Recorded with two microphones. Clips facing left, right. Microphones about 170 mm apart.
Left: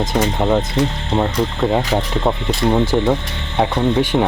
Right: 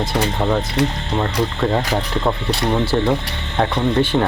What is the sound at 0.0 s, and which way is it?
Speech, 15° left (ahead or behind).